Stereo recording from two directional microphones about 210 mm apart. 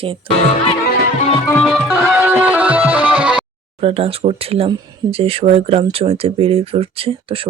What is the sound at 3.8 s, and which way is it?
Speech, 30° right (ahead or behind).